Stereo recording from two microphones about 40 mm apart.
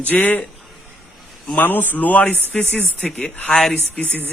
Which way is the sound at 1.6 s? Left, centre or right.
Left.